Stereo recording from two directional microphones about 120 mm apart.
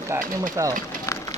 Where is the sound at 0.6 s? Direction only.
25° right (ahead or behind).